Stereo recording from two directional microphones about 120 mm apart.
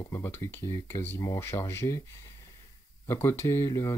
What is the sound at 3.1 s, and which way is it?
Speech, 20° left (ahead or behind).